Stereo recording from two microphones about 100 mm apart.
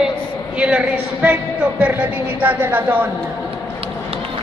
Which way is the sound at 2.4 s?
20° right (ahead or behind).